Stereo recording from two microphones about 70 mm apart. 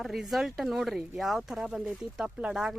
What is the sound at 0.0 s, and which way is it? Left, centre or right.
Speech, centre.